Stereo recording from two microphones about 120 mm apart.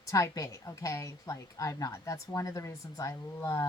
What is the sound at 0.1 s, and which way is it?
A woman's voice, 25° left (ahead or behind).